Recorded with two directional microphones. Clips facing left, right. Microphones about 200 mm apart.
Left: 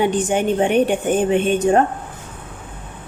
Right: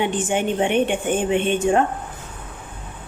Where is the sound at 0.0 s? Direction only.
40° left (ahead or behind).